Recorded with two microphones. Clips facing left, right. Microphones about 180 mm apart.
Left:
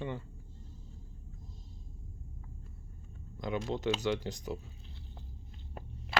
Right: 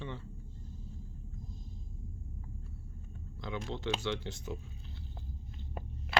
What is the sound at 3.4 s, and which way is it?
Speech, 45° left (ahead or behind).